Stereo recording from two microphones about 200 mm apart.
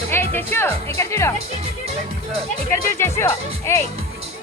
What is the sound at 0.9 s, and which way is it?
Speech, 15° left (ahead or behind).